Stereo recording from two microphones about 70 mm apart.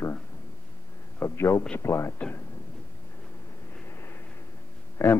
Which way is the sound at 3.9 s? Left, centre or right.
Left.